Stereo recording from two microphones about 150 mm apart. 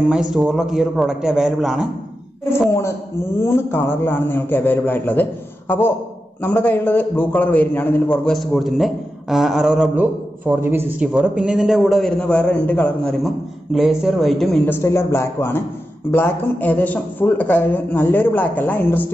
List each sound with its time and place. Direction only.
0.1 s a man's voice: 5° right (ahead or behind)
2.7 s a man's voice: 15° left (ahead or behind); by 10.0 s centre (ahead or behind)
10.4 s a man's voice: 15° right (ahead or behind); by 13.1 s 10° left (ahead or behind)
13.7 s a man's voice: centre (ahead or behind)
14.7 s a man's voice: 20° left (ahead or behind)